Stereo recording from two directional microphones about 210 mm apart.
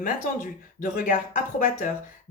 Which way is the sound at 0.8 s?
40° left (ahead or behind).